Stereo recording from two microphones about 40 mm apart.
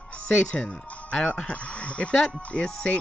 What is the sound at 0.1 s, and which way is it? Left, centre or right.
Speech, left.